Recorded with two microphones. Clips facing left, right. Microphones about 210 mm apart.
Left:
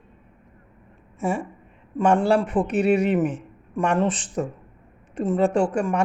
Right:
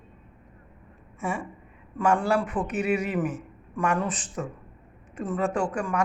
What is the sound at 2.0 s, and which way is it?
Speech, 30° left (ahead or behind).